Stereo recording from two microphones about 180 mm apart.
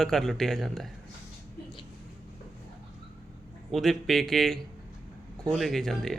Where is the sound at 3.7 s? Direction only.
Centre (ahead or behind).